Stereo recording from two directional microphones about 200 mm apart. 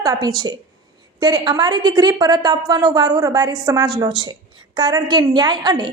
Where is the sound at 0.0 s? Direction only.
20° right (ahead or behind).